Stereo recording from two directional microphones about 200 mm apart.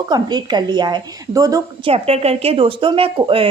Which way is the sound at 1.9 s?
30° right (ahead or behind).